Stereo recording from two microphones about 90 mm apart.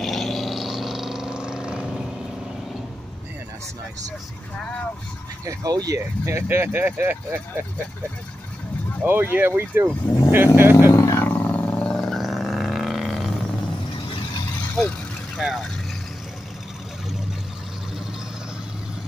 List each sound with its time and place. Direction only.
0.0 s a sound: centre (ahead or behind)
5.4 s speech: 40° right (ahead or behind)
5.9 s speech: 30° right (ahead or behind)
9.0 s speech: 25° right (ahead or behind)
10.9 s wild animals: 35° left (ahead or behind)
11.2 s roaring cats: 15° left (ahead or behind); by 13.3 s centre (ahead or behind)
14.8 s vehicle: 10° left (ahead or behind)
15.4 s speech: centre (ahead or behind)